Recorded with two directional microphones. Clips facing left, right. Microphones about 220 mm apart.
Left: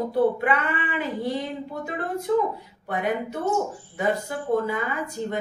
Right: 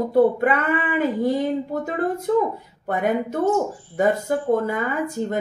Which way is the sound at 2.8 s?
50° right (ahead or behind).